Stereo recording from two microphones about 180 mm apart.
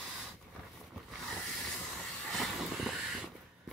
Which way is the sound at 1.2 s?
Centre (ahead or behind).